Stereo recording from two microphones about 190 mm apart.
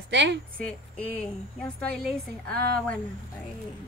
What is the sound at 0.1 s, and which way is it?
Speech, 65° right (ahead or behind).